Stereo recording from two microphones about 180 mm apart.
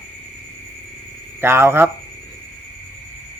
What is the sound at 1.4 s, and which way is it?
Speech, 15° right (ahead or behind).